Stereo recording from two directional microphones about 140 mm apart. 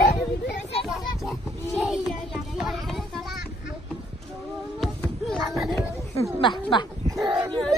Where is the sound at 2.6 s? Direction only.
Centre (ahead or behind).